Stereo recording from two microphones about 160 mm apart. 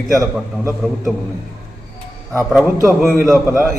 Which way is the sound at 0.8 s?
5° left (ahead or behind).